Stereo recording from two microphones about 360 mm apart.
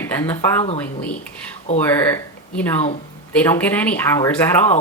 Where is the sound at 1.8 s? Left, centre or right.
Centre.